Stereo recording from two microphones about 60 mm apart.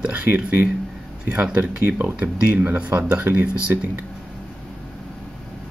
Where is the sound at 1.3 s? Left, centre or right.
Centre.